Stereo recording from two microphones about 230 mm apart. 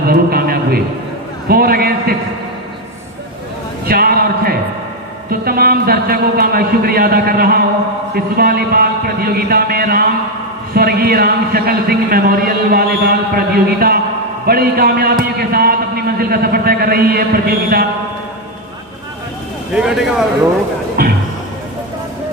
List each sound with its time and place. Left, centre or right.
0.1 s a sound: right
1.5 s a man's voice: right
3.8 s a sound: right
8.1 s a man's voice: right
19.7 s speech: centre
21.0 s a man's voice: right